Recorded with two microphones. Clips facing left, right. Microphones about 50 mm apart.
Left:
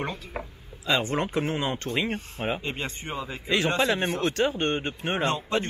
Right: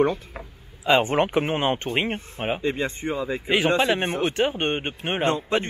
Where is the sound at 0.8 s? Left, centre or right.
Right.